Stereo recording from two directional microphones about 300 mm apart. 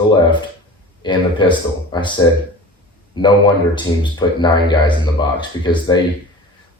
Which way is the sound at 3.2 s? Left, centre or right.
Centre.